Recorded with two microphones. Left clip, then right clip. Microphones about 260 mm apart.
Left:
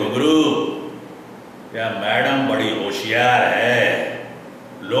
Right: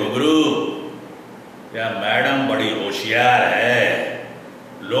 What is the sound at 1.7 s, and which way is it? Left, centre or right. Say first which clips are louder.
Speech: even; centre.